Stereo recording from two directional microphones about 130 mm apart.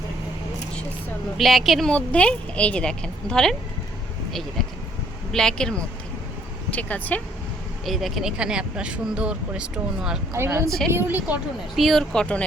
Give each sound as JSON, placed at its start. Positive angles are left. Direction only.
{"t": 1.4, "sound": "a woman's voice", "side_deg": 0}
{"t": 7.9, "sound": "speech", "side_deg": 0}
{"t": 10.3, "sound": "a woman's voice", "side_deg": -20}
{"t": 11.8, "sound": "speech", "side_deg": 0}